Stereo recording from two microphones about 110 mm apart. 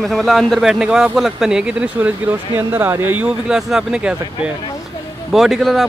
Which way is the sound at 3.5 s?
5° right (ahead or behind).